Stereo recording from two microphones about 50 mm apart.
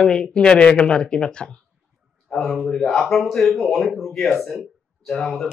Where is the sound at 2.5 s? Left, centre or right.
Centre.